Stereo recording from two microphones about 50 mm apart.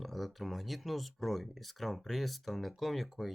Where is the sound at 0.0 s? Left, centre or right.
Centre.